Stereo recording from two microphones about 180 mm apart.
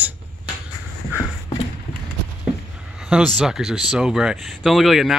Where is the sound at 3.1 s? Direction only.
Centre (ahead or behind).